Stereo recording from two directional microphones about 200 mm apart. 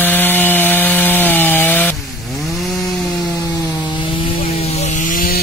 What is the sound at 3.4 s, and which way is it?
Wood, 25° left (ahead or behind).